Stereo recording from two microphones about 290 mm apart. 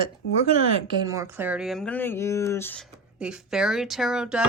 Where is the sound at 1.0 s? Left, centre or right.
Centre.